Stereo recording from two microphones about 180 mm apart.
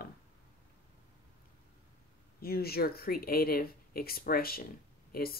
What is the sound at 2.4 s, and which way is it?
Speech, 60° left (ahead or behind).